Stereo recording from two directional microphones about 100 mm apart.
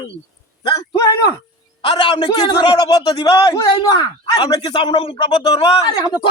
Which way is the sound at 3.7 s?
50° left (ahead or behind).